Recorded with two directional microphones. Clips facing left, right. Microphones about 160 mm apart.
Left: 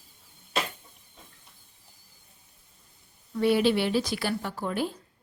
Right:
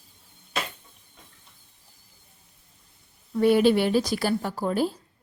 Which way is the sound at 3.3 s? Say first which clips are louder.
Right 4 dB; 45° right (ahead or behind).